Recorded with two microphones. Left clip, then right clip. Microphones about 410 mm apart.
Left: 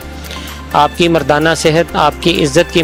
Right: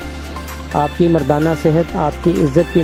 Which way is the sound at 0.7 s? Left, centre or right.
Left.